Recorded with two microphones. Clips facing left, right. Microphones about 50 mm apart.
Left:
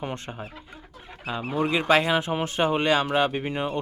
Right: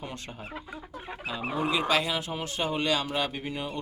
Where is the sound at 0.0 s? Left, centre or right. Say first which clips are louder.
Left 6 dB; left.